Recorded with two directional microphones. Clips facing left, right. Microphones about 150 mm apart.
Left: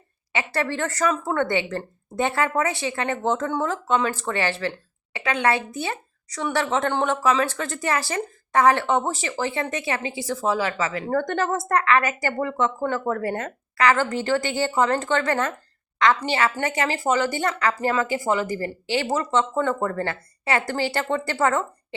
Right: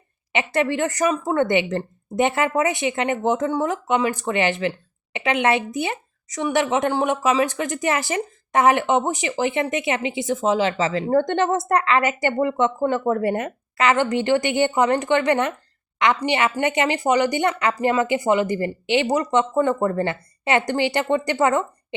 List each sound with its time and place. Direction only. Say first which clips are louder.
0.3 s speech: right 4 dB; 20° right (ahead or behind)